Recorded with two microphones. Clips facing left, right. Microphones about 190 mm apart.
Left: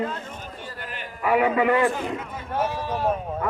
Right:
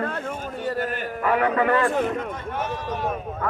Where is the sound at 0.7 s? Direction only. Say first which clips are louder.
Right 10 dB; 45° right (ahead or behind).